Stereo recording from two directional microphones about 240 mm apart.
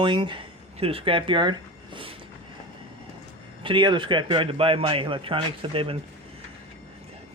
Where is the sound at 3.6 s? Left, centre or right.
Centre.